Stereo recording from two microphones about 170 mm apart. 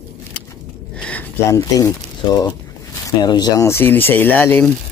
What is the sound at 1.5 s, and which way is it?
Speech, 20° left (ahead or behind).